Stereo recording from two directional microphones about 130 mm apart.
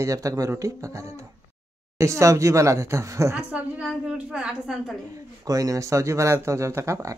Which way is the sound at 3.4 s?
10° right (ahead or behind).